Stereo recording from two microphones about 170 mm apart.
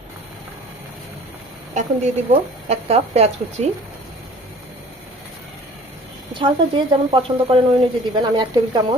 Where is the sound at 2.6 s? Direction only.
40° right (ahead or behind).